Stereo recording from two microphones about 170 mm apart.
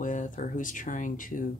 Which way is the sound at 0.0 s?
50° left (ahead or behind).